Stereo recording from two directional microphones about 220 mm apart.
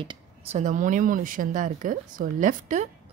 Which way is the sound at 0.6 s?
35° right (ahead or behind).